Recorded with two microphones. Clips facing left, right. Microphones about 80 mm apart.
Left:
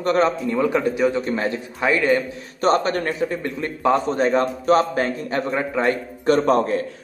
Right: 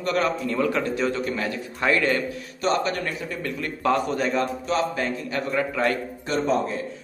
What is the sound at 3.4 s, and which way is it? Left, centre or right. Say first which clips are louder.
A man's voice: even; left.